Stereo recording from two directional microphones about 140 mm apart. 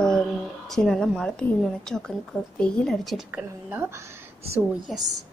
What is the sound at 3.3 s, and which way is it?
Speech, 10° right (ahead or behind).